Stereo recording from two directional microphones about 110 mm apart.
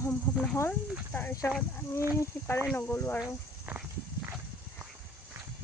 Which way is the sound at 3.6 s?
15° right (ahead or behind).